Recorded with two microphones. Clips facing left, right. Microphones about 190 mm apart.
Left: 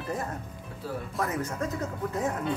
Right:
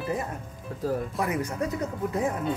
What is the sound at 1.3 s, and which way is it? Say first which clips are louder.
Speech: right 2 dB; 15° right (ahead or behind).